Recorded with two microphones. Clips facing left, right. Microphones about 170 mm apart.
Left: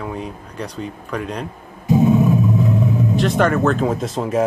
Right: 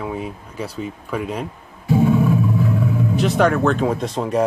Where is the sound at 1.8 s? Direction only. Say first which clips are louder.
Left 2 dB; 20° left (ahead or behind).